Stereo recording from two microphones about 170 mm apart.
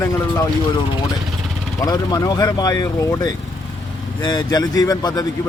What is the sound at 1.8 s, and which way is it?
Speech, 20° left (ahead or behind).